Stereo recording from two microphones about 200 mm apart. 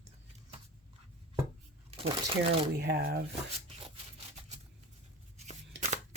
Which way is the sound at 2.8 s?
55° right (ahead or behind).